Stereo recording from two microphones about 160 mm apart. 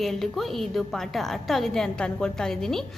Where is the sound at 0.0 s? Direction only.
Centre (ahead or behind).